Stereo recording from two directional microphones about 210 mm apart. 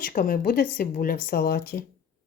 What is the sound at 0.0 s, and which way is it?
Speech, 40° left (ahead or behind).